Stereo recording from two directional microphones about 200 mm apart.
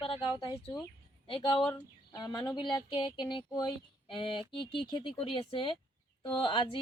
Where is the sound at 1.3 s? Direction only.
25° left (ahead or behind).